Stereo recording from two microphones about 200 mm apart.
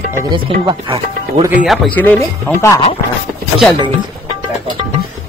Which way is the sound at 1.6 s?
10° left (ahead or behind).